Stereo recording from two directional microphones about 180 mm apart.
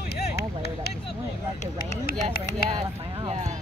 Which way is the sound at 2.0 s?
55° left (ahead or behind).